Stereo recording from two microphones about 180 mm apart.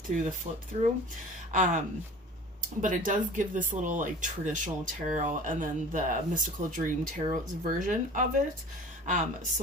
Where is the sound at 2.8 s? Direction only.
45° right (ahead or behind).